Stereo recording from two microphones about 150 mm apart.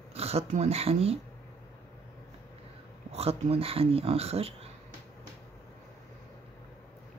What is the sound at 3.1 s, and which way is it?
Speech, 45° right (ahead or behind).